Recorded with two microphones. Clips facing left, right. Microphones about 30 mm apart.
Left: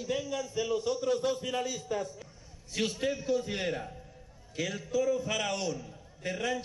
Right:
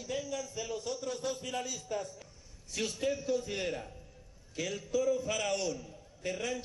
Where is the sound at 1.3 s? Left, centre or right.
Centre.